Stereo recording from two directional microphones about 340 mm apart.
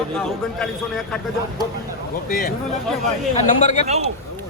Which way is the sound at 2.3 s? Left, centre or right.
Left.